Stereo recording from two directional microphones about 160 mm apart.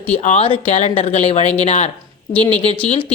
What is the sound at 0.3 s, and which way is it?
Speech, 35° left (ahead or behind).